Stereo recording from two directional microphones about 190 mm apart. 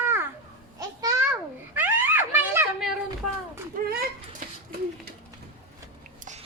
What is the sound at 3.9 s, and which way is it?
Speech, 55° right (ahead or behind).